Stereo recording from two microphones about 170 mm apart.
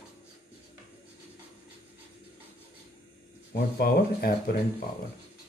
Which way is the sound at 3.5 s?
65° left (ahead or behind).